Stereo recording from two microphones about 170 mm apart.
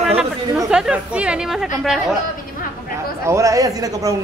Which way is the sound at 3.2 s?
20° right (ahead or behind).